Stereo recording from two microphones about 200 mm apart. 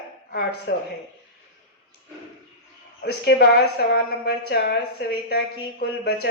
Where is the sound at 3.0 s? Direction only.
55° left (ahead or behind).